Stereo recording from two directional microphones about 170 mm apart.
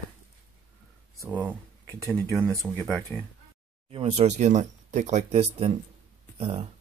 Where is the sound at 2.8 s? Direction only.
5° left (ahead or behind).